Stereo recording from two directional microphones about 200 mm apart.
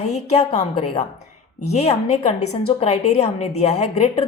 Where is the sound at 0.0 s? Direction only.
35° left (ahead or behind).